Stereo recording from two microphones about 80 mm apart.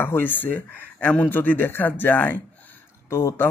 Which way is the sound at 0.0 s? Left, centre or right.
Left.